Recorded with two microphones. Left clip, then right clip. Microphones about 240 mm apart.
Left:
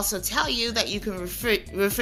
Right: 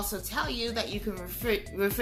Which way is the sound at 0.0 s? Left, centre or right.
Left.